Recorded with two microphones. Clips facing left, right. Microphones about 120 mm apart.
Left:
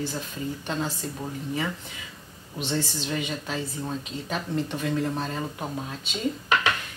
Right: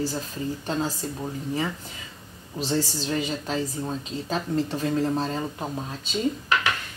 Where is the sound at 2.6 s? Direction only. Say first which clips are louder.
Right 3 dB; 35° right (ahead or behind).